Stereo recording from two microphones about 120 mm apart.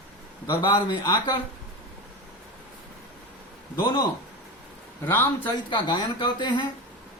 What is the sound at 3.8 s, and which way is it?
Speech, 35° left (ahead or behind).